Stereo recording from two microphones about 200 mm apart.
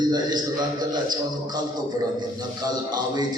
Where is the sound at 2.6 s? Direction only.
20° right (ahead or behind).